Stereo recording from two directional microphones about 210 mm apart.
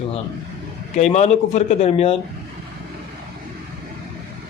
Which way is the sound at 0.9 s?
35° left (ahead or behind).